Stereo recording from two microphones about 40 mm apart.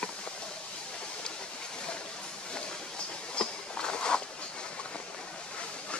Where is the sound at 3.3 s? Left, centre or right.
Left.